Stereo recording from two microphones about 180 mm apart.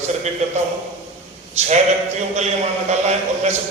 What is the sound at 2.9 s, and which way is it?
Speech, 40° right (ahead or behind).